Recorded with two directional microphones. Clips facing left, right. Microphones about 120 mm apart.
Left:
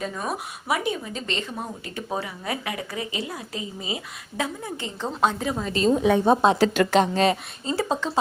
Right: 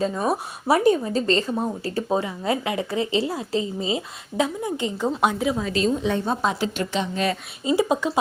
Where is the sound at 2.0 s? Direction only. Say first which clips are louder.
Right 5 dB; 25° right (ahead or behind).